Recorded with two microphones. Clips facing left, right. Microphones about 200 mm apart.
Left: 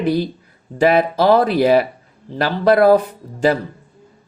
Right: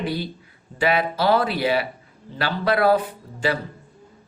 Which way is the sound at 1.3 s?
45° left (ahead or behind).